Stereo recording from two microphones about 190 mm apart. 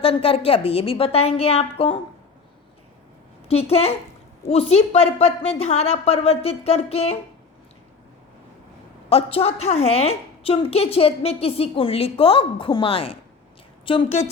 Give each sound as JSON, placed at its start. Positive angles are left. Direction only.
{"t": 0.0, "sound": "a woman's voice", "side_deg": 30}
{"t": 3.5, "sound": "a woman's voice", "side_deg": 30}
{"t": 9.0, "sound": "a woman's voice", "side_deg": 30}